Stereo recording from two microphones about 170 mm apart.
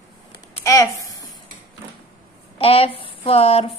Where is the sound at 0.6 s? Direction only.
20° left (ahead or behind).